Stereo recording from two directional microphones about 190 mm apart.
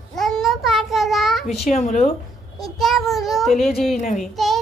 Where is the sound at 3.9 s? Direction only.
40° left (ahead or behind).